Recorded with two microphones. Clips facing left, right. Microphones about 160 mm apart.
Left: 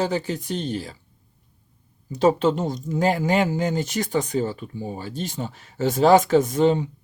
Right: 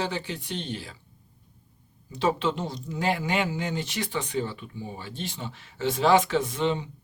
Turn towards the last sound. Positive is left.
turn(degrees=45)  # may be behind; listen again after turning